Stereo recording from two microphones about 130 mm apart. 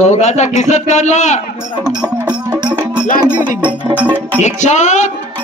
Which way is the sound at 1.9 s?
10° right (ahead or behind).